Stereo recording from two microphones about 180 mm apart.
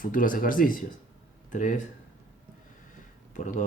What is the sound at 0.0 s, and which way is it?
Speech, 50° left (ahead or behind).